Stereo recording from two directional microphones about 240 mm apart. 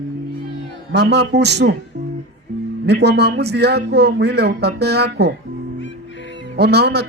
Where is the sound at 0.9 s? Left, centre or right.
Right.